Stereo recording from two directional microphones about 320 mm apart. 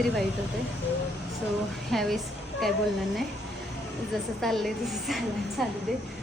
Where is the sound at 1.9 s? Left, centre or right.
Centre.